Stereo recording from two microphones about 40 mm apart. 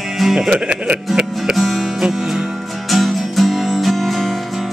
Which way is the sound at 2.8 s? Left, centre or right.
Centre.